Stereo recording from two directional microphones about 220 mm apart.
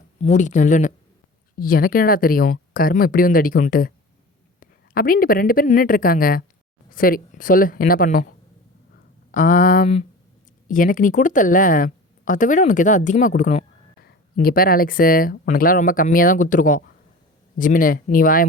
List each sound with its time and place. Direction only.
0.2 s speech: 30° left (ahead or behind)
9.3 s speech: 35° left (ahead or behind)